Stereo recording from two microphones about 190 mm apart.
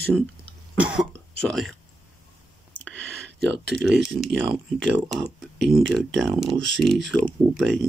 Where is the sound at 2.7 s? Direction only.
5° left (ahead or behind).